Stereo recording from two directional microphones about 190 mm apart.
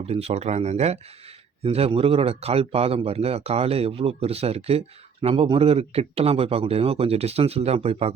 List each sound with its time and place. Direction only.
0.0 s speech: 30° right (ahead or behind)